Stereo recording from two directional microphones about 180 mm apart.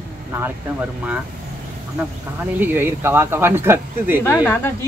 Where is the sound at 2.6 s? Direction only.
10° right (ahead or behind).